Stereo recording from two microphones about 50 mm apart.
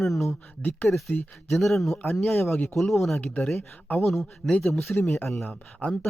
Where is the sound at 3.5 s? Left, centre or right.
Left.